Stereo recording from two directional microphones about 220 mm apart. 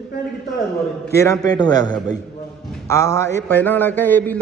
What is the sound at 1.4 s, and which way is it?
A man's voice, 15° left (ahead or behind).